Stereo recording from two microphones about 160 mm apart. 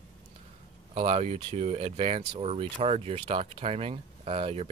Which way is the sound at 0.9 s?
40° right (ahead or behind).